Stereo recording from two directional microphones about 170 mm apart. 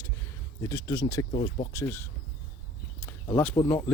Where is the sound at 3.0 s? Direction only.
15° left (ahead or behind).